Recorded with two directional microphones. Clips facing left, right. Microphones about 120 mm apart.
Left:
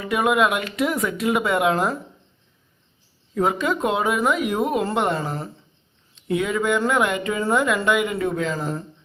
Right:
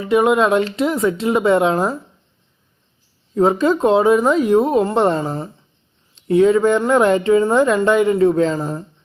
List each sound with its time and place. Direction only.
0.0 s speech: 25° right (ahead or behind)
3.3 s speech: 30° right (ahead or behind)